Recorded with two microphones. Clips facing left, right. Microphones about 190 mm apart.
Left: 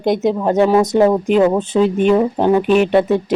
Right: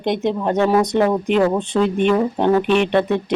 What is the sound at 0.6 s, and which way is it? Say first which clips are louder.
Speech: left 4 dB; 20° left (ahead or behind).